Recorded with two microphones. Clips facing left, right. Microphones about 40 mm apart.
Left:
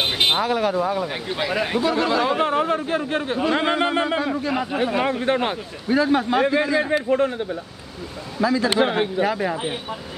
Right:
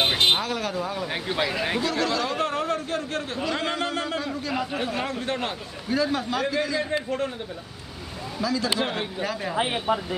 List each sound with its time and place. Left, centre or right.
0.2 s speech: centre
1.0 s speech: centre
1.9 s a man's voice: centre
8.4 s speech: left